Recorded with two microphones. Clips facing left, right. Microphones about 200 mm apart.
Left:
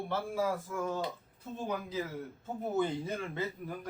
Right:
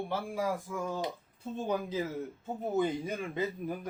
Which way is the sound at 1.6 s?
25° right (ahead or behind).